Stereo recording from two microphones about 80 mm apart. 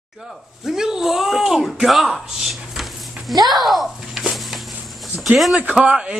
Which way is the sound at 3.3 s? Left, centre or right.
Right.